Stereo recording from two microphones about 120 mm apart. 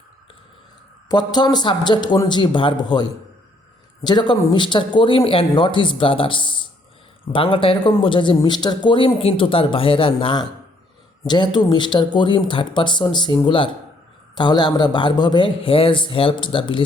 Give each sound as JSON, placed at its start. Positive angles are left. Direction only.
{"t": 1.0, "sound": "speech", "side_deg": 35}